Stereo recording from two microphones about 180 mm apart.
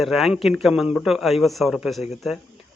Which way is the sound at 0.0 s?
Centre (ahead or behind).